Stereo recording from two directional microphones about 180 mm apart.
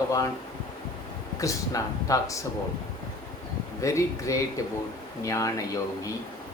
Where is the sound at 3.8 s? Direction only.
15° left (ahead or behind).